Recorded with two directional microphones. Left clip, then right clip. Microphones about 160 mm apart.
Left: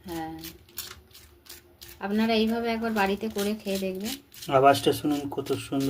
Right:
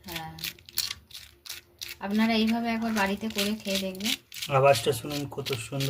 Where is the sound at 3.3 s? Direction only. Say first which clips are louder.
Even; 20° right (ahead or behind).